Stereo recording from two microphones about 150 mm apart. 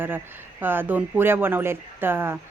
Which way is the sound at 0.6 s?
15° right (ahead or behind).